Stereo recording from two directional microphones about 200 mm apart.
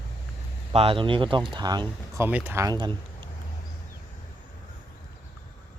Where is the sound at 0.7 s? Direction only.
30° right (ahead or behind).